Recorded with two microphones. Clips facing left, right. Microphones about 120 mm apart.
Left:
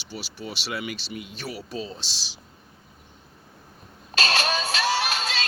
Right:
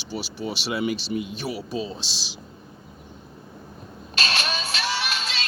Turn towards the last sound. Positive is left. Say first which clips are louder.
# left 3 dB
turn(degrees=40)  # may be behind; listen again after turning